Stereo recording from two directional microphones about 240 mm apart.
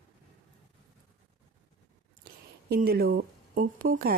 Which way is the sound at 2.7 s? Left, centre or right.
Right.